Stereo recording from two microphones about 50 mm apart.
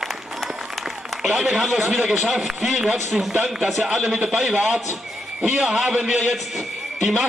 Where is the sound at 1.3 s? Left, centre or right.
Centre.